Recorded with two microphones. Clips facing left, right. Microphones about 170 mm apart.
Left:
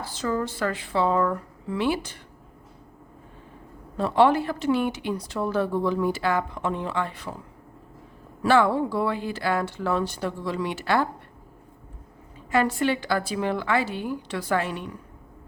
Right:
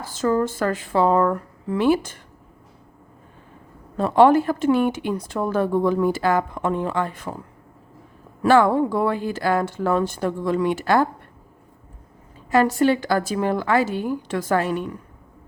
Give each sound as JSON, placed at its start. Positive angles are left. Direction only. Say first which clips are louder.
{"t": 0.0, "sound": "speech", "louder": "right 6 dB", "side_deg": -45}
{"t": 3.9, "sound": "speech", "louder": "right 5 dB", "side_deg": -45}
{"t": 8.4, "sound": "speech", "louder": "right 4 dB", "side_deg": -45}
{"t": 12.5, "sound": "speech", "louder": "right 5 dB", "side_deg": -40}